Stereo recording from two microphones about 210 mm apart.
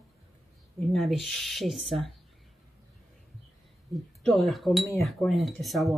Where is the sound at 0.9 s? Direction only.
Centre (ahead or behind).